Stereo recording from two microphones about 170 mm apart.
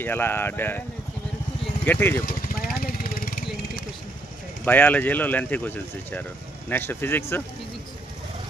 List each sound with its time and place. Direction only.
0.0 s speech: 10° left (ahead or behind)
1.9 s speech: 10° left (ahead or behind)
2.2 s vehicle: 50° left (ahead or behind)
4.6 s speech: 10° left (ahead or behind)
6.7 s speech: 10° left (ahead or behind)